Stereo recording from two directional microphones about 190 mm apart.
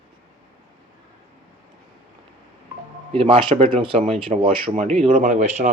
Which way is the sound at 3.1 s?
30° right (ahead or behind).